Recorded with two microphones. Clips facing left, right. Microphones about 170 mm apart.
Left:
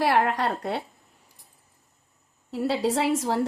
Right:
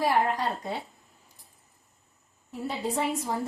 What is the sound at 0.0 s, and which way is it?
Speech, 75° left (ahead or behind).